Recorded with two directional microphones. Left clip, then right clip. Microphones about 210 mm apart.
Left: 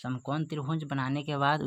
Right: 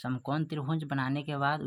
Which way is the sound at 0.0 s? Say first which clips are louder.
Even; centre (ahead or behind).